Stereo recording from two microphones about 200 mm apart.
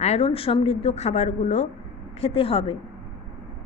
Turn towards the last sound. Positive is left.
turn(degrees=25)  # may be behind; listen again after turning